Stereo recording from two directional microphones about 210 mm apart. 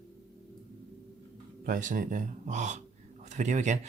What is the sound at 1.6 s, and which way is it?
Speech, 40° right (ahead or behind).